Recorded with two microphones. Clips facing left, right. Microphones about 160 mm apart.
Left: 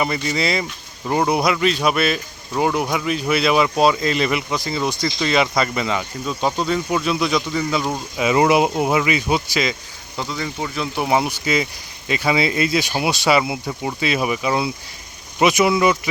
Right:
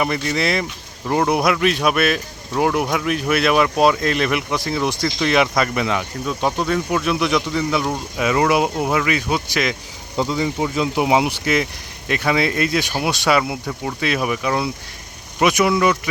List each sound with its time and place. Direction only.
0.0 s speech: centre (ahead or behind)
10.3 s speech: 15° right (ahead or behind)
11.4 s speech: centre (ahead or behind)